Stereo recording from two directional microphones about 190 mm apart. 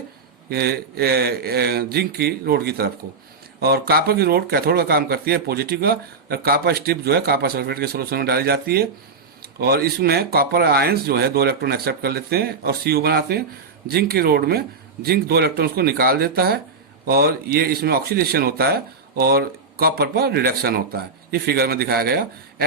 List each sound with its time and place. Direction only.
0.5 s a man's voice: 55° right (ahead or behind)